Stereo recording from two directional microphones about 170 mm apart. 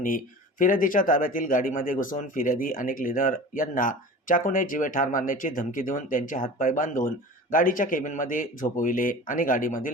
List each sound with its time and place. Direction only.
0.6 s speech: 55° left (ahead or behind)